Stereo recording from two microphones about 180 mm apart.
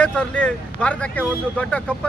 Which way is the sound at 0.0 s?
5° left (ahead or behind).